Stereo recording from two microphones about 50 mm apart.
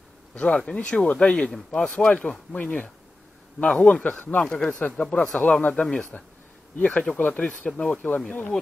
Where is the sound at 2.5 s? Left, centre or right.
Left.